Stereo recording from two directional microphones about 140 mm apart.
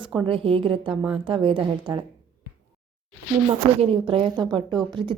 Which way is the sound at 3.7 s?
40° right (ahead or behind).